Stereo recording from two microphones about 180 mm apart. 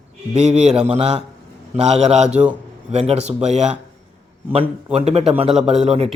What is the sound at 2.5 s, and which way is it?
Speech, 35° right (ahead or behind).